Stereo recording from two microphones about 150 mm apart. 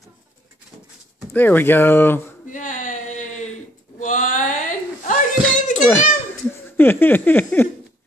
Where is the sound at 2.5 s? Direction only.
60° left (ahead or behind).